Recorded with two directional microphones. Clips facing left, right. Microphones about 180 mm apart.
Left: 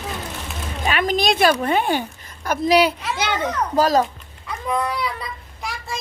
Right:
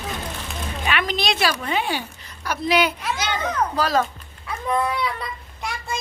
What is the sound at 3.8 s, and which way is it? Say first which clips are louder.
Speech: left 5 dB; 40° left (ahead or behind).